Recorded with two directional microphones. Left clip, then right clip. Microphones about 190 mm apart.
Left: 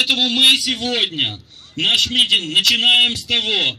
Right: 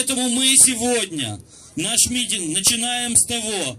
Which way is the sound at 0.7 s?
10° right (ahead or behind).